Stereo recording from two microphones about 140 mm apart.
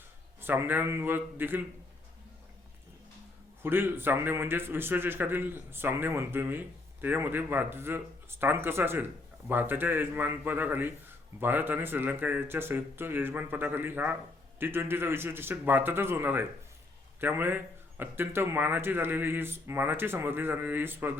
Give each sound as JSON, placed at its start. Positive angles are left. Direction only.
{"t": 0.4, "sound": "a man's voice", "side_deg": -15}
{"t": 3.6, "sound": "a man's voice", "side_deg": -15}